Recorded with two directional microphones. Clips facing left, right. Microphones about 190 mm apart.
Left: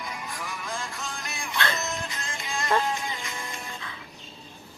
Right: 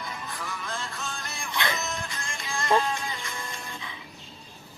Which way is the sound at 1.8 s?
20° left (ahead or behind).